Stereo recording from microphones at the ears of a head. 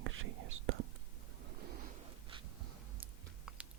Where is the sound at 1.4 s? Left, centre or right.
Right.